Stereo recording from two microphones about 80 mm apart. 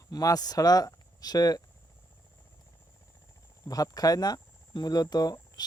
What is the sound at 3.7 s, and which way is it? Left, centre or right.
Speech, left.